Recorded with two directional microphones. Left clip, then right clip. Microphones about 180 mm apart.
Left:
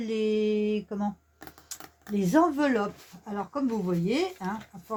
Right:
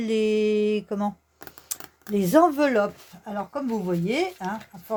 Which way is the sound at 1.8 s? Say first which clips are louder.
Right 3 dB; 15° right (ahead or behind).